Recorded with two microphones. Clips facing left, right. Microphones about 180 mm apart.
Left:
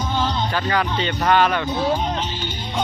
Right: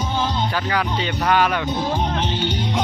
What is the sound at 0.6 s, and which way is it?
Speech, 5° right (ahead or behind).